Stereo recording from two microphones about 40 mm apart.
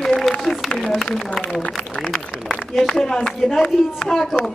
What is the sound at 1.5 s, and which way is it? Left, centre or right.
Speech, left.